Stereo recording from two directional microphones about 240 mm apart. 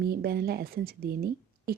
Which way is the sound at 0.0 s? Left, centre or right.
Right.